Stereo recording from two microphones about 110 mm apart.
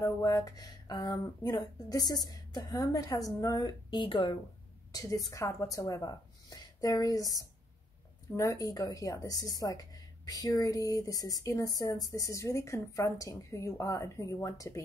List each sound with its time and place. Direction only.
0.0 s a woman's voice: 30° left (ahead or behind); by 4.4 s 45° left (ahead or behind)
4.9 s a woman's voice: 35° left (ahead or behind)